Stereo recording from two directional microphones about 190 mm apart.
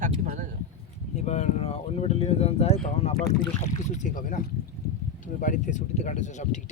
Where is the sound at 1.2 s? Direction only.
35° left (ahead or behind).